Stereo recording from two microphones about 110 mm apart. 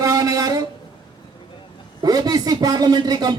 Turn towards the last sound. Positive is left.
turn(degrees=-35)  # may be behind; listen again after turning